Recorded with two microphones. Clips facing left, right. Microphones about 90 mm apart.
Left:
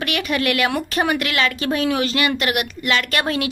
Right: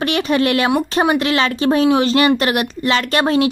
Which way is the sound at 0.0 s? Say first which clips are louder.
Right 5 dB; 30° right (ahead or behind).